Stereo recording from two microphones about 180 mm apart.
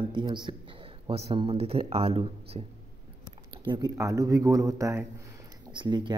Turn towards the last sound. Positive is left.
turn(degrees=-25)  # may be behind; listen again after turning